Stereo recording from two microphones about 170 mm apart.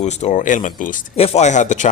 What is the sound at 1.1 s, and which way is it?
Speech, 35° left (ahead or behind).